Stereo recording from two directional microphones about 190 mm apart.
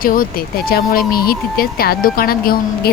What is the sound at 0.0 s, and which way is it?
Speech, 50° left (ahead or behind).